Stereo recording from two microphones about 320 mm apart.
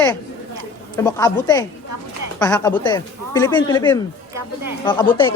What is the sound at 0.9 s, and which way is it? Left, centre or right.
Speech, centre.